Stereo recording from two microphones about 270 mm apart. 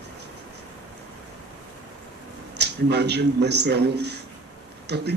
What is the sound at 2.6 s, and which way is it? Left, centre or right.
Speech, right.